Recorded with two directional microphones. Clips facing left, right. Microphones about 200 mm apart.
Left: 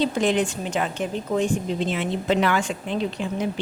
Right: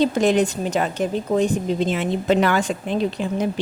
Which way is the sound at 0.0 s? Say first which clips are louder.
Right 4 dB; 45° right (ahead or behind).